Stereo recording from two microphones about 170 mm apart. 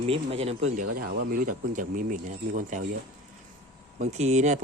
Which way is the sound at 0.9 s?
60° right (ahead or behind).